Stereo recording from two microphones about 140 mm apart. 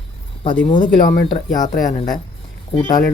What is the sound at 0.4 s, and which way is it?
Speech, 35° left (ahead or behind).